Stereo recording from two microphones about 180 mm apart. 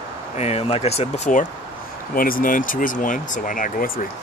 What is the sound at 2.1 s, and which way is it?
Speech, 50° left (ahead or behind).